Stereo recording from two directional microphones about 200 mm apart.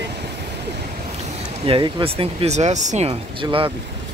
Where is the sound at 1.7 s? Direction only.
25° right (ahead or behind).